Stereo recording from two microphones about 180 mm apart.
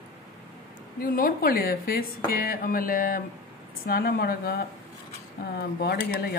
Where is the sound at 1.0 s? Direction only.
55° left (ahead or behind).